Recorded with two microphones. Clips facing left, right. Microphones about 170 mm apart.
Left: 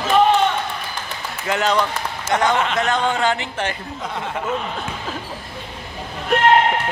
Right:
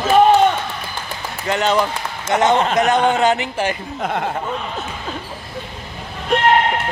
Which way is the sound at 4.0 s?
55° right (ahead or behind).